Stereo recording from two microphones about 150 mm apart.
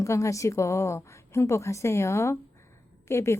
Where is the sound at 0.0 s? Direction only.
20° left (ahead or behind).